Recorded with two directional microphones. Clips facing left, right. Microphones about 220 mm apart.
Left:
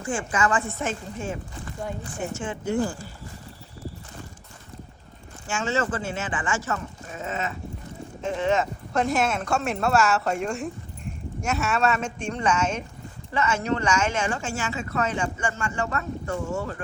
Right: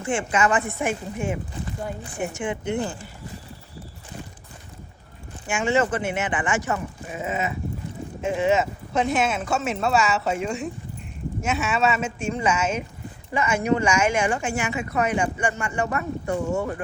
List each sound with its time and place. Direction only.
0.0 s speech: 25° right (ahead or behind)
5.5 s speech: 15° right (ahead or behind)